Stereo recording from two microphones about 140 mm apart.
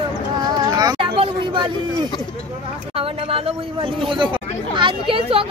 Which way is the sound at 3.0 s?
40° right (ahead or behind).